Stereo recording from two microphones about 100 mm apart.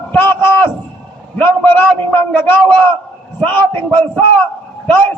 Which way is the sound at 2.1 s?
20° left (ahead or behind).